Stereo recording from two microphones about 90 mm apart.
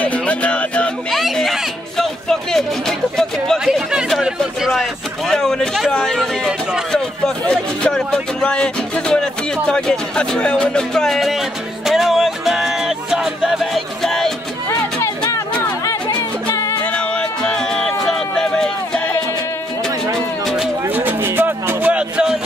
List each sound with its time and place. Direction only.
0.0 s music: 15° left (ahead or behind)
1.1 s speech: centre (ahead or behind)
3.5 s a sound: 5° right (ahead or behind)
4.4 s a man's voice: centre (ahead or behind)
14.7 s music: 35° left (ahead or behind)
16.8 s music: 10° left (ahead or behind)
20.4 s music: centre (ahead or behind)
20.8 s music: 20° right (ahead or behind)